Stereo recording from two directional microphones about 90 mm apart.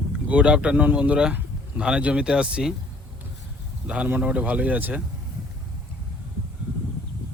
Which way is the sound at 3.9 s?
15° right (ahead or behind).